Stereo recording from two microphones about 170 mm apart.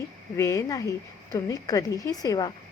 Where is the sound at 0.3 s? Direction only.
20° left (ahead or behind).